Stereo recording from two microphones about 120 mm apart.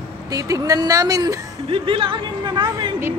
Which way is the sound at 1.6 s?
50° right (ahead or behind).